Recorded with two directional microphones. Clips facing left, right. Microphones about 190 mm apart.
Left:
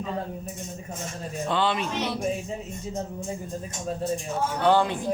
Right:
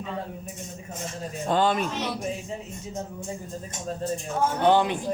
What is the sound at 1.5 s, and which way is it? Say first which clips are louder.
Speech: right 3 dB; 45° right (ahead or behind).